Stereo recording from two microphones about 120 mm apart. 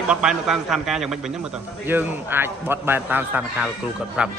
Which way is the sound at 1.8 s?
15° right (ahead or behind).